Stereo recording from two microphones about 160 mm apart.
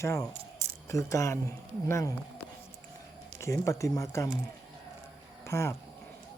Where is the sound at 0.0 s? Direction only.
15° left (ahead or behind).